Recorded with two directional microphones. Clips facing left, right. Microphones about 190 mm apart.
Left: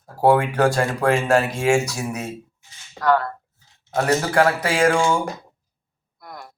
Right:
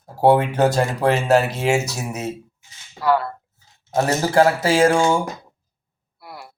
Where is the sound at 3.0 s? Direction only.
10° right (ahead or behind).